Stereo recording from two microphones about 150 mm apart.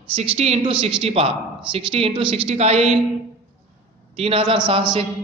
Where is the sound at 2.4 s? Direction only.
45° right (ahead or behind).